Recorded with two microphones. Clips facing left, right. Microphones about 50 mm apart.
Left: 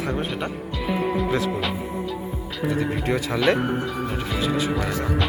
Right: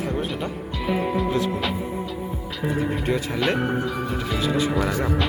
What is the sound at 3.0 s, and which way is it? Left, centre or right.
Speech, left.